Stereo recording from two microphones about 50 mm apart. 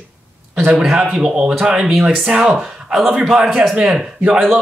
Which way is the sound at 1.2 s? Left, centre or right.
Centre.